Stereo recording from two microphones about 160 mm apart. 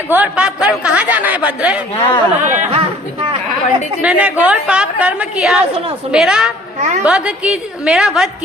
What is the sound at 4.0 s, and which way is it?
A woman's voice, 10° right (ahead or behind).